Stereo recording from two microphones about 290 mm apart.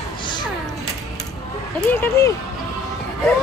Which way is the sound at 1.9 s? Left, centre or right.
Centre.